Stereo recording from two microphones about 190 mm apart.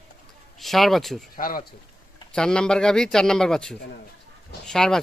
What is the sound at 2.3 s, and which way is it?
A man's voice, 5° left (ahead or behind).